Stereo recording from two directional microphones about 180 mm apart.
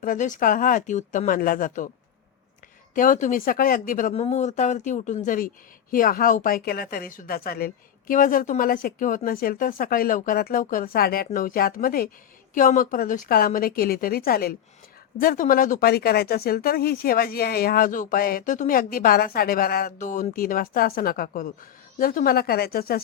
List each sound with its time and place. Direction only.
0.0 s speech: 50° left (ahead or behind)
2.9 s speech: 45° left (ahead or behind)
4.1 s speech: 40° left (ahead or behind); by 23.0 s 55° left (ahead or behind)